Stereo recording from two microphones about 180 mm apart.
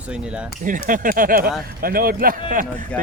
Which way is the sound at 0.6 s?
45° right (ahead or behind).